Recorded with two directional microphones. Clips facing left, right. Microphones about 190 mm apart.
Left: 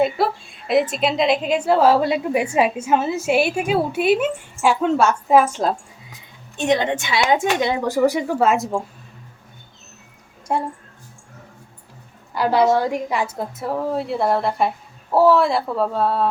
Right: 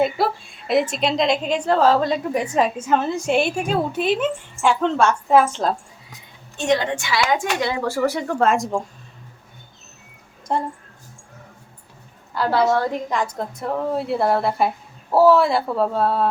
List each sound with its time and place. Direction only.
0.0 s a woman's voice: centre (ahead or behind)
6.6 s speech: 20° left (ahead or behind); by 8.8 s 5° left (ahead or behind)
10.5 s a woman's voice: 10° left (ahead or behind)
12.3 s a woman's voice: 15° left (ahead or behind)